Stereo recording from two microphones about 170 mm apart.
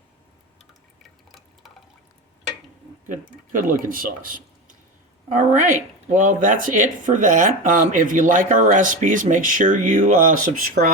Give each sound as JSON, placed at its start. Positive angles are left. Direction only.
{"t": 3.5, "sound": "speech", "side_deg": -50}